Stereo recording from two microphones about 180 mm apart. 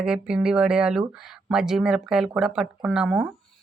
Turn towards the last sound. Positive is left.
turn(degrees=-5)  # may be behind; listen again after turning